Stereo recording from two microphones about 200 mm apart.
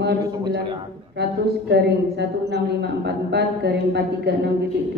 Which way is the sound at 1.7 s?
55° right (ahead or behind).